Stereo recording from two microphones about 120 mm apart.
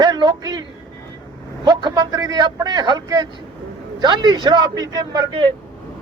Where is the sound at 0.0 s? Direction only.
40° right (ahead or behind).